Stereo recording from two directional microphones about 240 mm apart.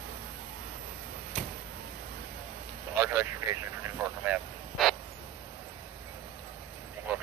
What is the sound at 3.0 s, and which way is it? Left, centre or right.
Vehicle, centre.